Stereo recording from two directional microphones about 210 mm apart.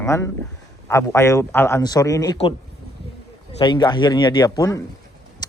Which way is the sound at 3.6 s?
20° left (ahead or behind).